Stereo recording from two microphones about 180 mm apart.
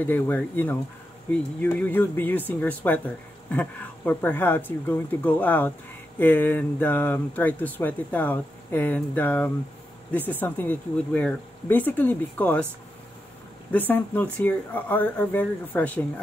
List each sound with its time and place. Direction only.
0.0 s speech: 10° left (ahead or behind)
13.7 s speech: 10° left (ahead or behind)